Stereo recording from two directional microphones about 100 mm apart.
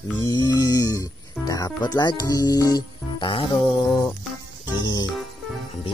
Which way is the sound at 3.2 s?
55° left (ahead or behind).